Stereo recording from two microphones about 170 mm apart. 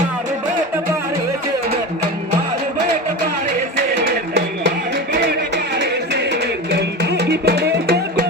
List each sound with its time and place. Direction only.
6.7 s music: 80° right